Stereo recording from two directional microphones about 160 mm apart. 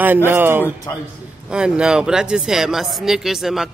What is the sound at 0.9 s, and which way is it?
Speech, 20° left (ahead or behind).